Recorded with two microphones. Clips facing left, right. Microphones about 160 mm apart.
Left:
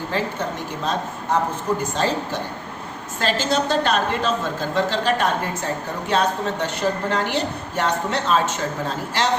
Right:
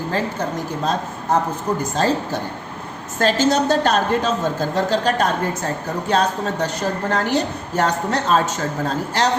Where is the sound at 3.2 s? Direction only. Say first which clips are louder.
Right 5 dB; 45° right (ahead or behind).